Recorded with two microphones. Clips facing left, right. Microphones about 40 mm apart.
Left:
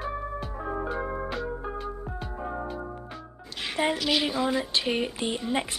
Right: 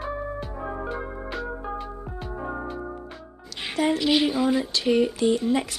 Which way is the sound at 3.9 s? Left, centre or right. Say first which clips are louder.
Right 4 dB; centre.